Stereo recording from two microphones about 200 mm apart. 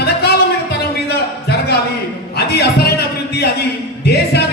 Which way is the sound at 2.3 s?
55° left (ahead or behind).